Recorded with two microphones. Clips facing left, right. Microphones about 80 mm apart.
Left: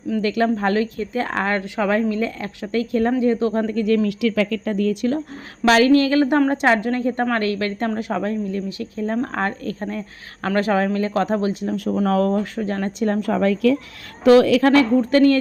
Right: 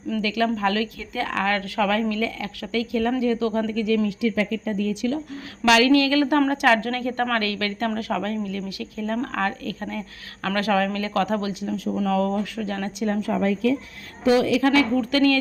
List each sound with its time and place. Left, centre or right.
0.2 s a woman's voice: left
3.7 s a woman's voice: left
4.2 s speech: left
5.6 s a woman's voice: left
11.6 s a woman's voice: left
13.1 s speech: left
14.9 s a woman's voice: left